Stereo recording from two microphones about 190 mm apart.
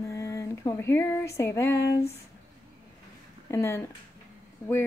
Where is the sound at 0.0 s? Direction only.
15° left (ahead or behind).